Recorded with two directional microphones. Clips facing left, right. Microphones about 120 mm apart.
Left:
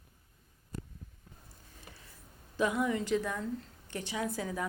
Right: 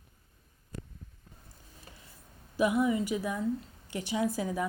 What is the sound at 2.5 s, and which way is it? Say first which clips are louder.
A woman's voice: right 4 dB; 10° right (ahead or behind).